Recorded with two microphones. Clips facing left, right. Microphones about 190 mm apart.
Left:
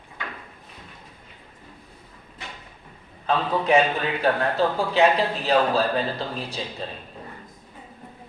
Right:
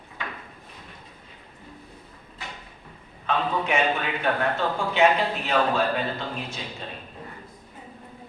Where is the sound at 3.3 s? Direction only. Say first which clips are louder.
Left 5 dB; 35° left (ahead or behind).